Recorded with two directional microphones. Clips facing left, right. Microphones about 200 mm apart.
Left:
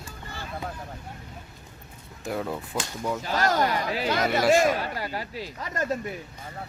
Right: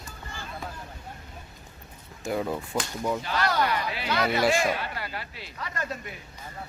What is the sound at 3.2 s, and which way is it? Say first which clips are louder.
Speech: left 5 dB; 40° left (ahead or behind).